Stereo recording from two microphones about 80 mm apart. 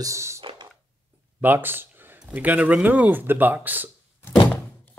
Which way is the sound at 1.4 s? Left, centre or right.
Right.